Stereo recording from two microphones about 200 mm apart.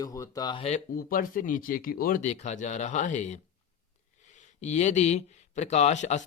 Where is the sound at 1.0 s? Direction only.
45° left (ahead or behind).